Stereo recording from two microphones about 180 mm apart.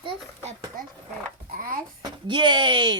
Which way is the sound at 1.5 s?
50° right (ahead or behind).